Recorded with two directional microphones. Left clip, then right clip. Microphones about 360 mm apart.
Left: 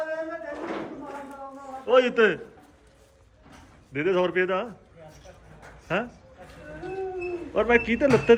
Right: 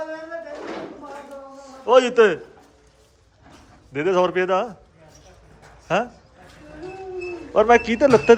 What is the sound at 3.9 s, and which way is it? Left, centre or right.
Speech, centre.